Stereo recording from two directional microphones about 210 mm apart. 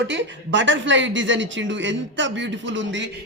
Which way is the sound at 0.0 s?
60° right (ahead or behind).